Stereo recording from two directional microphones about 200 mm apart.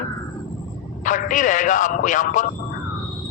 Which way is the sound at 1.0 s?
40° left (ahead or behind).